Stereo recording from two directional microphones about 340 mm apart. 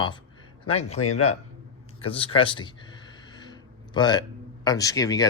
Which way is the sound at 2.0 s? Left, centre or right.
Centre.